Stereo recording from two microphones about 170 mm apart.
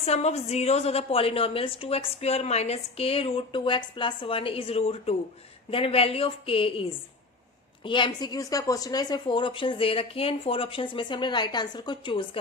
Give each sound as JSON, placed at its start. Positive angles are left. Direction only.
{"t": 0.0, "sound": "a woman's voice", "side_deg": 40}
{"t": 7.9, "sound": "a woman's voice", "side_deg": 30}